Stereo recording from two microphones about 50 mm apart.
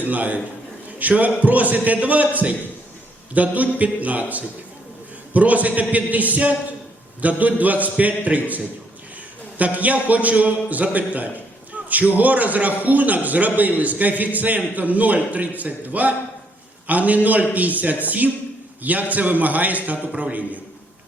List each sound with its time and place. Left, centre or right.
0.0 s a man's voice: right
9.6 s a man's voice: right